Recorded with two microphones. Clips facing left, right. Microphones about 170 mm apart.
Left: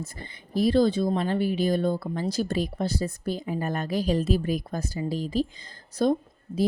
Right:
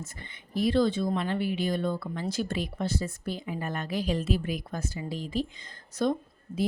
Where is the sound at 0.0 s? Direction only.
35° left (ahead or behind).